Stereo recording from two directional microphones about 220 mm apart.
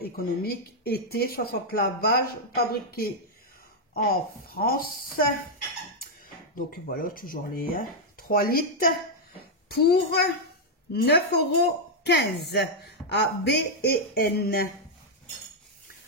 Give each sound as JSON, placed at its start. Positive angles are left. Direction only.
{"t": 0.0, "sound": "speech", "side_deg": 45}
{"t": 6.5, "sound": "speech", "side_deg": 40}